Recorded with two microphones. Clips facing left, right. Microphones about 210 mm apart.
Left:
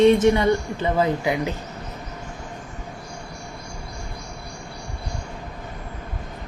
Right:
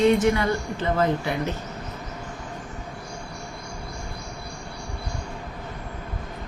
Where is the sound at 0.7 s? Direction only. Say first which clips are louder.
Left 1 dB; 15° left (ahead or behind).